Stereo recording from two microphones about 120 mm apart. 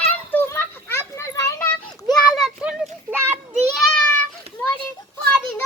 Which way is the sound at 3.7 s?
Centre (ahead or behind).